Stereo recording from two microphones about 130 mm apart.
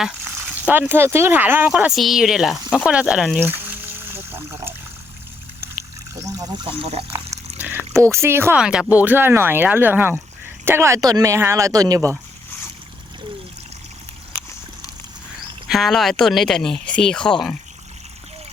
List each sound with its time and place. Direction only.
0.3 s speech: 15° right (ahead or behind)
1.7 s speech: 5° right (ahead or behind)
3.4 s trickle: 15° right (ahead or behind)
6.2 s speech: 30° right (ahead or behind)
7.1 s water: 15° right (ahead or behind)
7.9 s speech: 20° right (ahead or behind)
8.5 s speech: 5° right (ahead or behind); by 12.0 s 30° right (ahead or behind)
15.7 s speech: centre (ahead or behind)